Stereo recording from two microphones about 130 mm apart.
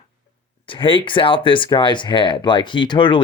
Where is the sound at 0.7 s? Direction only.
40° left (ahead or behind).